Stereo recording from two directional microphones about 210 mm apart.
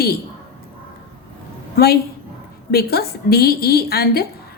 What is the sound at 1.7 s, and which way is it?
A woman's voice, 50° left (ahead or behind).